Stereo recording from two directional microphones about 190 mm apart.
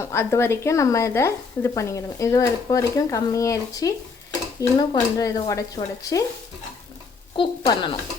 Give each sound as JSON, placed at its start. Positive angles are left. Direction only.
{"t": 0.0, "sound": "speech", "side_deg": 15}
{"t": 7.3, "sound": "a woman's voice", "side_deg": 20}